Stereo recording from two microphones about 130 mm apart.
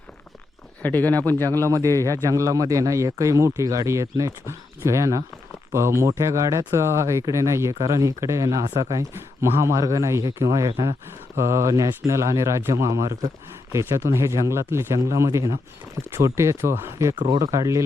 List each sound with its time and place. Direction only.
0.8 s speech: 10° left (ahead or behind)
1.6 s speech: 25° right (ahead or behind)
11.3 s speech: 20° right (ahead or behind)
17.2 s speech: 35° right (ahead or behind)